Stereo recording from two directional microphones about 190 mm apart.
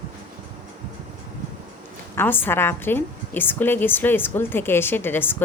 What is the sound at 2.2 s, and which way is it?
A woman's voice, 10° left (ahead or behind).